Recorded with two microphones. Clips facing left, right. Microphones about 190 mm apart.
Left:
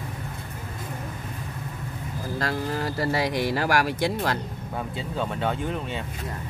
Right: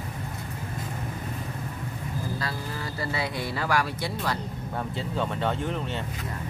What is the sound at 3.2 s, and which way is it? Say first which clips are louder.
Speech: left 6 dB; 90° left.